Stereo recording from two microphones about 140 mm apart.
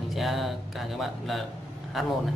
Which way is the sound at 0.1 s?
Centre (ahead or behind).